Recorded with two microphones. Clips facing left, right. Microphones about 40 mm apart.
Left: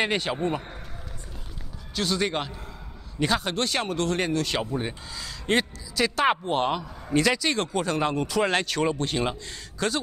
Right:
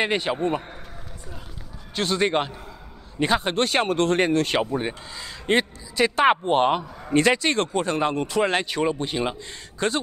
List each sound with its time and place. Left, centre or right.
0.0 s a man's voice: centre
2.0 s speech: right
7.7 s a man's voice: right; by 9.4 s centre
9.4 s speech: right